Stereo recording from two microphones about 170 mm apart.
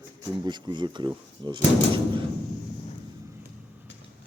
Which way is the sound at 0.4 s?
25° right (ahead or behind).